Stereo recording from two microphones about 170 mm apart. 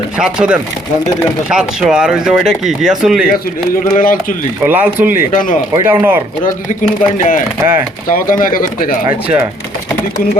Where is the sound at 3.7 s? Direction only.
55° left (ahead or behind).